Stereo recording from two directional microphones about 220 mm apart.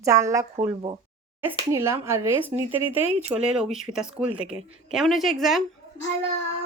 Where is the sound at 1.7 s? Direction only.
10° right (ahead or behind).